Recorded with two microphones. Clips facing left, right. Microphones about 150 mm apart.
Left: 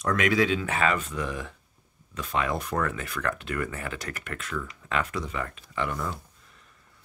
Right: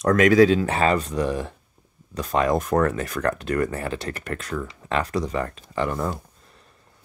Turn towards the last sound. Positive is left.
turn(degrees=-40)  # may be behind; listen again after turning